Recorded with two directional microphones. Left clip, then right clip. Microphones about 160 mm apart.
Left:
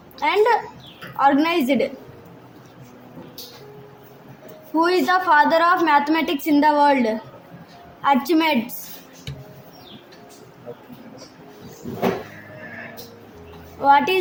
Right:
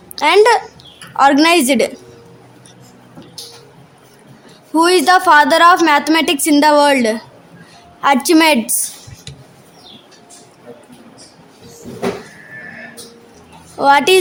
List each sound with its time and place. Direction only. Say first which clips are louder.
0.2 s a woman's voice: right 8 dB; 55° right (ahead or behind)
4.7 s a woman's voice: right 8 dB; 55° right (ahead or behind)
13.7 s a woman's voice: right 5 dB; 55° right (ahead or behind)